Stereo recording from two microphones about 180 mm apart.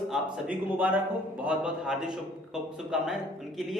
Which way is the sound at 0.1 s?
10° right (ahead or behind).